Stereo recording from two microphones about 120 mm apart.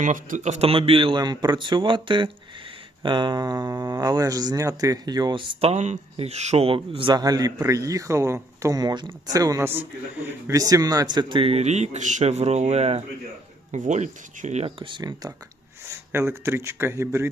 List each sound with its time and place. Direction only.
0.0 s a man's voice: 90° right; by 5.6 s 40° right (ahead or behind)
5.6 s speech: 70° right (ahead or behind); by 9.6 s 30° right (ahead or behind)
10.2 s speech: 20° right (ahead or behind)
10.6 s speech: 30° right (ahead or behind); by 13.1 s 65° right (ahead or behind)
13.7 s speech: 85° right
14.8 s speech: 40° right (ahead or behind)
15.9 s speech: 20° right (ahead or behind)